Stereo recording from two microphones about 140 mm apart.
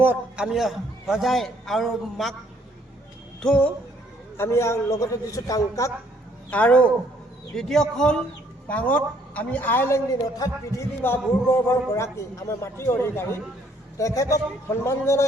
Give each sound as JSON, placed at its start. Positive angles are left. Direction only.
{"t": 0.0, "sound": "a man's voice", "side_deg": -15}
{"t": 0.4, "sound": "a man's voice", "side_deg": 0}
{"t": 3.4, "sound": "a woman's voice", "side_deg": 5}
{"t": 4.4, "sound": "a man's voice", "side_deg": 20}
{"t": 6.5, "sound": "a woman's voice", "side_deg": 10}